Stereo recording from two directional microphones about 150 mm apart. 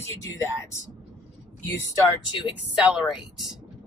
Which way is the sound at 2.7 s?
5° right (ahead or behind).